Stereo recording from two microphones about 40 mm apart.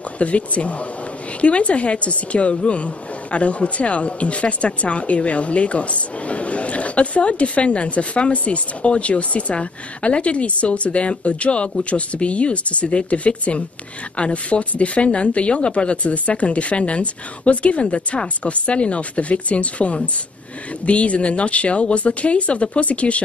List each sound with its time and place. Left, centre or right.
0.2 s a woman's voice: left